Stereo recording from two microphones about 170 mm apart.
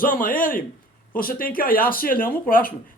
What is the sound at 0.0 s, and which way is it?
A man's voice, 55° left (ahead or behind).